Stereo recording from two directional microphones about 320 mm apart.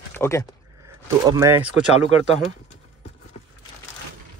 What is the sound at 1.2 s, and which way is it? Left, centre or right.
Speech, centre.